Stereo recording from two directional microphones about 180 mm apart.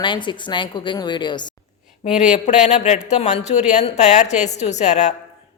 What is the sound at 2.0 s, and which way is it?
Speech, 40° left (ahead or behind).